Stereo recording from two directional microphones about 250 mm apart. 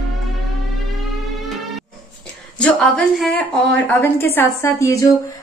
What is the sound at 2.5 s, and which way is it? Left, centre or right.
A woman's voice, centre.